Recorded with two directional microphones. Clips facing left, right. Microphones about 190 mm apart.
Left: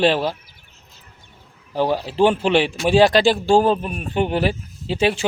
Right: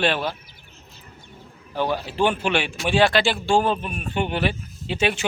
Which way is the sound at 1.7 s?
35° left (ahead or behind).